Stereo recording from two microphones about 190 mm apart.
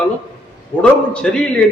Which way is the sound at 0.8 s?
5° left (ahead or behind).